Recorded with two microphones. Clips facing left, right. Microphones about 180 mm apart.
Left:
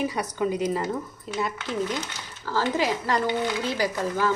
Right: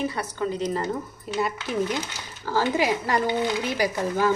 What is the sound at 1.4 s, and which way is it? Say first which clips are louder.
Speech: right 2 dB; 10° right (ahead or behind).